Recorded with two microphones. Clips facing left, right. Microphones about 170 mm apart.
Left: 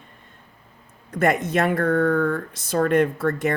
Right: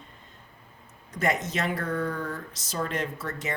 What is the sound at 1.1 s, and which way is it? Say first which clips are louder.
Speech: left 7 dB; 55° left (ahead or behind).